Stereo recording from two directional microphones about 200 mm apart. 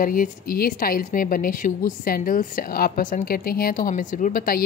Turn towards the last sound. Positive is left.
turn(degrees=45)  # may be behind; listen again after turning